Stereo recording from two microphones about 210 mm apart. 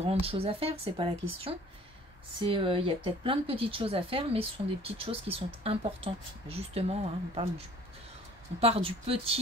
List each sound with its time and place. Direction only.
0.0 s speech: 30° right (ahead or behind)